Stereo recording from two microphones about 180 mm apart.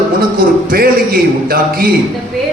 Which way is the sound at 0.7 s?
55° right (ahead or behind).